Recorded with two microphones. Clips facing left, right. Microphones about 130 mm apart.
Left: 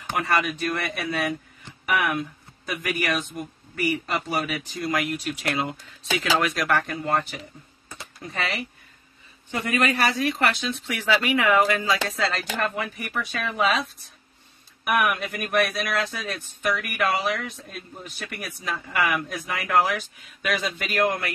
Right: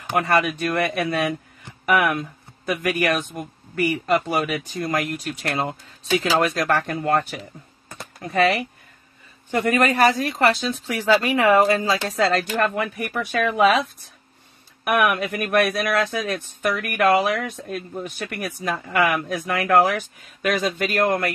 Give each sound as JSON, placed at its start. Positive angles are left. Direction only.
{"t": 0.1, "sound": "speech", "side_deg": -45}
{"t": 7.9, "sound": "a sound", "side_deg": -55}
{"t": 9.5, "sound": "speech", "side_deg": -50}
{"t": 12.3, "sound": "speech", "side_deg": -50}
{"t": 14.9, "sound": "speech", "side_deg": -55}